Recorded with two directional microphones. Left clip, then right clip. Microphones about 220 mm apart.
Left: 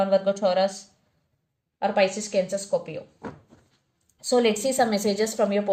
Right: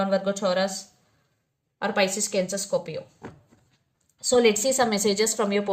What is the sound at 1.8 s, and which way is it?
A woman's voice, 30° right (ahead or behind).